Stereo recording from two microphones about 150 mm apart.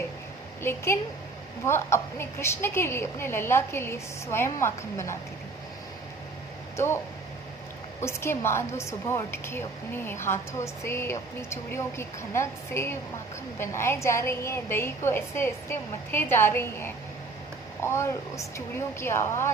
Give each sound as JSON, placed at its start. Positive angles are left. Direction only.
{"t": 0.6, "sound": "a woman's voice", "side_deg": 15}
{"t": 6.7, "sound": "speech", "side_deg": 15}
{"t": 8.0, "sound": "a woman's voice", "side_deg": 15}